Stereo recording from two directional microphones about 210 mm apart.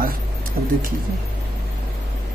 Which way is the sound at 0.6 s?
45° right (ahead or behind).